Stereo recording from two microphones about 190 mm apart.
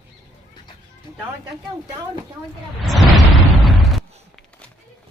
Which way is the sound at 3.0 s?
Centre (ahead or behind).